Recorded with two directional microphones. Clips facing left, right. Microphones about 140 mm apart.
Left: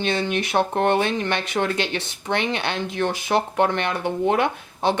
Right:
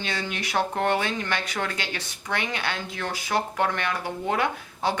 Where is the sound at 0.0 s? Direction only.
25° left (ahead or behind).